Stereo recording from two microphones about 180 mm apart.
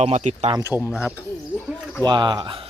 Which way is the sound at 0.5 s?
15° right (ahead or behind).